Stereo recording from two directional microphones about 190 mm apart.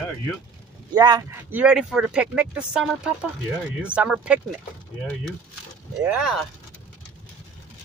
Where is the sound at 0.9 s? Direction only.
20° right (ahead or behind).